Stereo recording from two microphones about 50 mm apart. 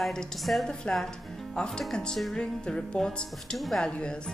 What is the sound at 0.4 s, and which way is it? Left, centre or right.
Speech, centre.